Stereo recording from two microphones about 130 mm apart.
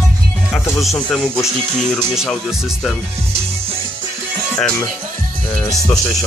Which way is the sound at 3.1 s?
50° right (ahead or behind).